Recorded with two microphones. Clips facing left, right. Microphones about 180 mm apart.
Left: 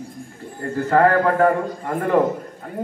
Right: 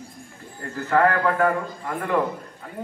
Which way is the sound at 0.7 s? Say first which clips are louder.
Left 4 dB; 40° left (ahead or behind).